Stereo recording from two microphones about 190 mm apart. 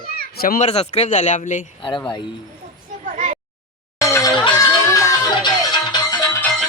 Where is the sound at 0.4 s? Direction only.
50° left (ahead or behind).